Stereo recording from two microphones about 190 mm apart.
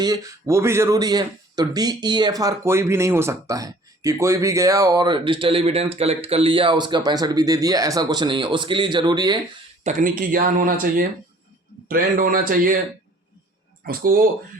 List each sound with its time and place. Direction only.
0.0 s speech: 20° right (ahead or behind)
9.8 s speech: 45° right (ahead or behind)
13.8 s speech: 50° right (ahead or behind)